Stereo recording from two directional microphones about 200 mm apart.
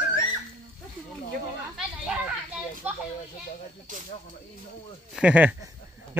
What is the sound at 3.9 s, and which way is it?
Speech, 40° right (ahead or behind).